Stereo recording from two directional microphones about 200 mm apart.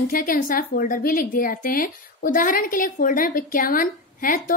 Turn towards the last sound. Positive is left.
turn(degrees=45)  # may be behind; listen again after turning